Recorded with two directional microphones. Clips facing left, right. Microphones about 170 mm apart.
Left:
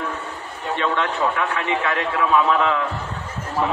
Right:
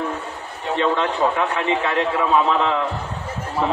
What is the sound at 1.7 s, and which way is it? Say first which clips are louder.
A man's voice: right 2 dB; 30° right (ahead or behind).